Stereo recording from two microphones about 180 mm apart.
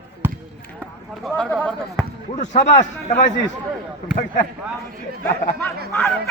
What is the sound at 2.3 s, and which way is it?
Speech, 40° left (ahead or behind).